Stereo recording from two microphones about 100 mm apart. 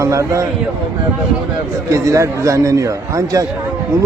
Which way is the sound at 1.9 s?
30° right (ahead or behind).